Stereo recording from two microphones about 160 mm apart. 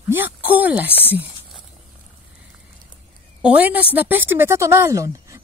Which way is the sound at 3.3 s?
10° right (ahead or behind).